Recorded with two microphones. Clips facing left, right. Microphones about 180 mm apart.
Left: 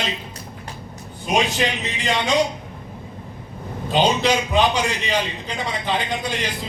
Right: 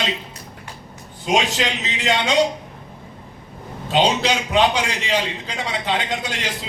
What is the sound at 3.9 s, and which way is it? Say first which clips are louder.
A man's voice: even; 85° right.